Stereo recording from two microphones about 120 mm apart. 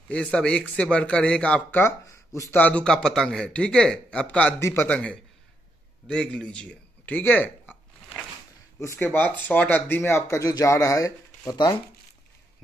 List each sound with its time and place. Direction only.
0.1 s speech: 10° left (ahead or behind); by 2.6 s 25° left (ahead or behind)
2.6 s speech: 10° left (ahead or behind)
4.6 s speech: 25° left (ahead or behind)
4.8 s speech: 10° left (ahead or behind)
6.0 s a sound: 5° left (ahead or behind)
8.7 s speech: 20° left (ahead or behind); by 11.8 s 35° left (ahead or behind)